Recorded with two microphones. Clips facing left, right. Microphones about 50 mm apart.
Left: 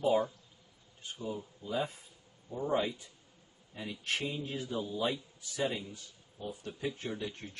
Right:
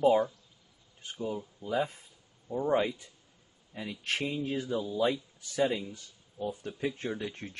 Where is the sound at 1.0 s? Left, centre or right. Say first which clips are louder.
Right 4 dB; right.